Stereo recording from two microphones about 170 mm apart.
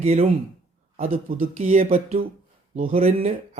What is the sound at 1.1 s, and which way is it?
Speech, 50° right (ahead or behind).